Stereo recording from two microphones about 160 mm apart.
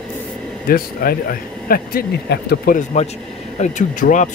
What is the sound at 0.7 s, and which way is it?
Speech, 65° left (ahead or behind).